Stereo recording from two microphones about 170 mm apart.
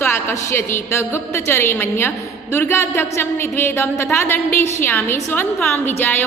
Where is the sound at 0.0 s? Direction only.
15° left (ahead or behind).